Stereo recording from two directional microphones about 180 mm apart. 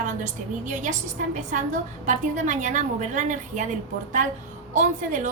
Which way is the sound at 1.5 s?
45° right (ahead or behind).